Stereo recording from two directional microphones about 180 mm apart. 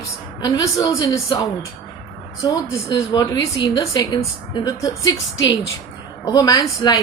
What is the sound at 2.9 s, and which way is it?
A woman's voice, 25° left (ahead or behind).